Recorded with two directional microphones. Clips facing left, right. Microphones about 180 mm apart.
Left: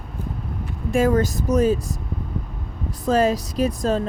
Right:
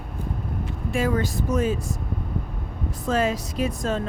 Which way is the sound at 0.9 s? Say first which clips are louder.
Left 6 dB; 45° left (ahead or behind).